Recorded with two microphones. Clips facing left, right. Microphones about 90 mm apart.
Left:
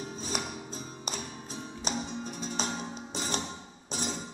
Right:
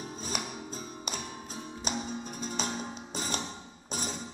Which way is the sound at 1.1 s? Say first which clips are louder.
Even; 45° right (ahead or behind).